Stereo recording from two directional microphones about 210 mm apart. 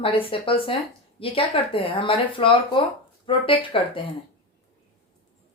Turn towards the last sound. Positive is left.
turn(degrees=25)  # may be behind; listen again after turning